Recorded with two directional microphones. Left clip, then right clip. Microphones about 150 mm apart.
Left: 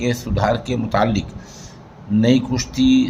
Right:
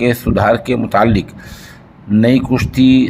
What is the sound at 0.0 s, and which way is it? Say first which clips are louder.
Speech: right 7 dB; 45° right (ahead or behind).